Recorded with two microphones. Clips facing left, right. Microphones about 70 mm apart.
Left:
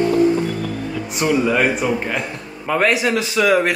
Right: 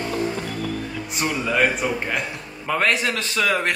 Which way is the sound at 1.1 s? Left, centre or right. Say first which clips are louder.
Left 7 dB; centre.